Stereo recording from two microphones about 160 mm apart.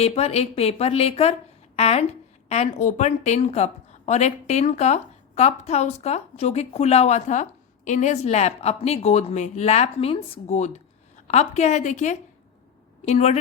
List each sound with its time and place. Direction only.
0.0 s a woman's voice: 40° left (ahead or behind)